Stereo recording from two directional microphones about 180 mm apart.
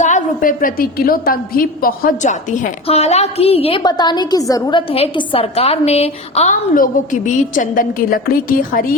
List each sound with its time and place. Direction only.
0.0 s a woman's voice: 45° left (ahead or behind); by 4.8 s 20° left (ahead or behind)
4.9 s a woman's voice: 30° left (ahead or behind); by 8.9 s 55° left (ahead or behind)